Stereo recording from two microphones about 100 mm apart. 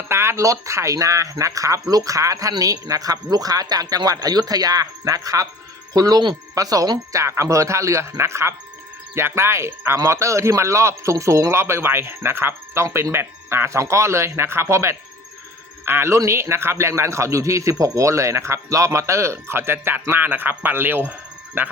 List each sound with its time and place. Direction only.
0.1 s speech: 25° right (ahead or behind)